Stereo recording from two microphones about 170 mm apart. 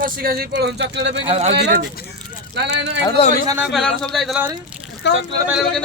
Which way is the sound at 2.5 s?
90° right.